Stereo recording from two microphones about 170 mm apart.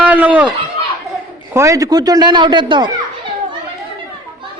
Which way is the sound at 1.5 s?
20° right (ahead or behind).